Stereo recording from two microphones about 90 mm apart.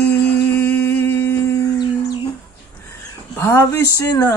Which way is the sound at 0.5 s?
20° left (ahead or behind).